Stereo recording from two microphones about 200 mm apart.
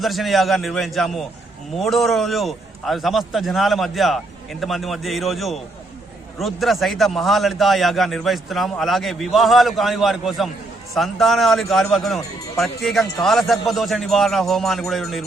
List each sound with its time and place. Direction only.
0.0 s a man's voice: centre (ahead or behind)